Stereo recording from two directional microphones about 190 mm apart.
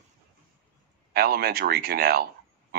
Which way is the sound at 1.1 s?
55° right (ahead or behind).